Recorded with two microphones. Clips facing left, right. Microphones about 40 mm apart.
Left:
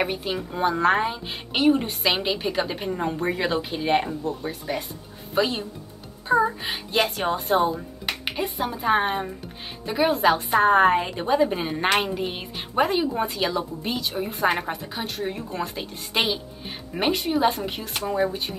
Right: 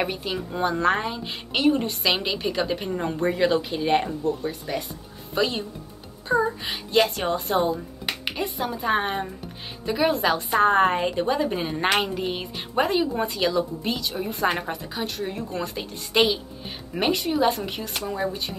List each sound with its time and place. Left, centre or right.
0.0 s a woman's voice: centre